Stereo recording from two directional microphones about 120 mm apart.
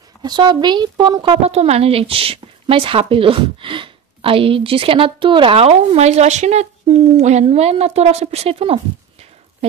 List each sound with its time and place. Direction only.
0.2 s speech: 40° right (ahead or behind)
1.4 s a woman's voice: 60° right (ahead or behind)